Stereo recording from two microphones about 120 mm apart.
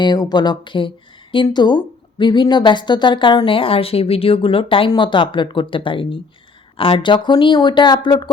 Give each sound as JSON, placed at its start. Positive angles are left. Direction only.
{"t": 0.0, "sound": "speech", "side_deg": 35}